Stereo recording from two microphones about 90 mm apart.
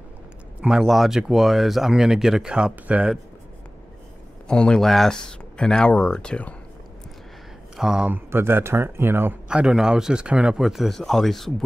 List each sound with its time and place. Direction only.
0.6 s speech: 5° right (ahead or behind)
4.5 s speech: 10° left (ahead or behind)
7.7 s speech: 5° right (ahead or behind)
8.1 s speech: 25° right (ahead or behind)
9.5 s speech: 10° right (ahead or behind)